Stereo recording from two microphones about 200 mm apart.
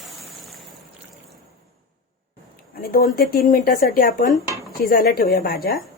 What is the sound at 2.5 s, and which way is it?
Speech, 45° left (ahead or behind).